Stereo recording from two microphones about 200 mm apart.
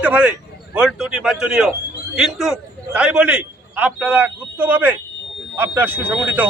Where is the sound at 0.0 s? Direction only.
5° right (ahead or behind).